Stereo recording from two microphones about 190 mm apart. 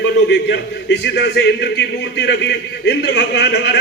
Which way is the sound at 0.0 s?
60° left (ahead or behind).